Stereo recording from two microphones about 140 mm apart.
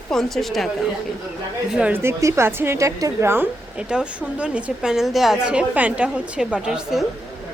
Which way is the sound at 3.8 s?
5° right (ahead or behind).